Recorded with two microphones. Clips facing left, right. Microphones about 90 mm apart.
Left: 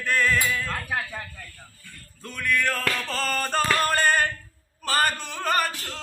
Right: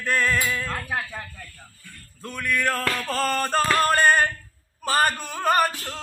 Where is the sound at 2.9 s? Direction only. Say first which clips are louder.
Right 3 dB; 40° right (ahead or behind).